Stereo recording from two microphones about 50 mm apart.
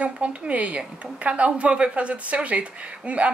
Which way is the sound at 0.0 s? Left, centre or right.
Right.